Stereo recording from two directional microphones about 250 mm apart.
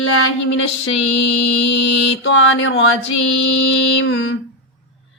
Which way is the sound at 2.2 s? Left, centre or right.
Left.